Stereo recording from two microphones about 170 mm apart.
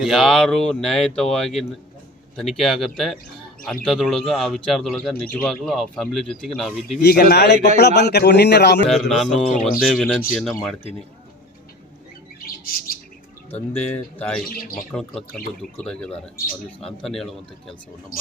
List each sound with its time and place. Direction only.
0.0 s speech: centre (ahead or behind)
7.0 s a man's voice: 65° left (ahead or behind)
8.9 s speech: centre (ahead or behind)
12.6 s bird: 60° left (ahead or behind)
13.7 s speech: 10° left (ahead or behind)
14.4 s speech: 60° left (ahead or behind)
15.8 s speech: 5° left (ahead or behind)